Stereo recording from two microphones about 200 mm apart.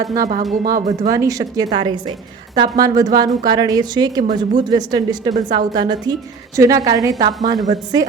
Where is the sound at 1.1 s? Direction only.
15° right (ahead or behind).